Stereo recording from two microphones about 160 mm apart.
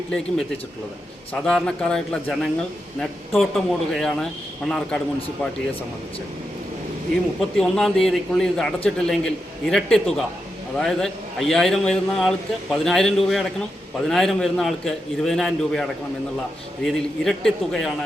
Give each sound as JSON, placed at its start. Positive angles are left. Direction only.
{"t": 1.3, "sound": "a man's voice", "side_deg": 5}
{"t": 7.5, "sound": "a man's voice", "side_deg": 5}